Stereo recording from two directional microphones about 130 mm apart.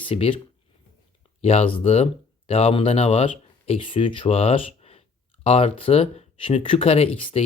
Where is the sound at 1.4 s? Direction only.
50° left (ahead or behind).